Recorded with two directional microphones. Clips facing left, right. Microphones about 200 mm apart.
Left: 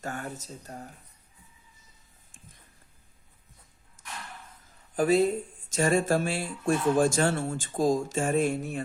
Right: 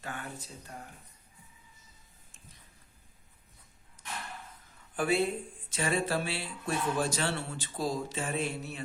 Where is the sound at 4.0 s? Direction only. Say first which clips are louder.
Right 1 dB; 45° left (ahead or behind).